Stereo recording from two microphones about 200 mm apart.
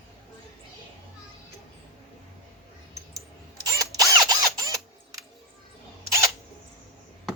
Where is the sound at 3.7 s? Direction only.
20° right (ahead or behind).